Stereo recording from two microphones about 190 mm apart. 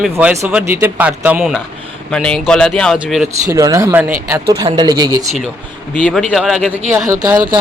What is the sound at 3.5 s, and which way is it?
Speech, 15° right (ahead or behind).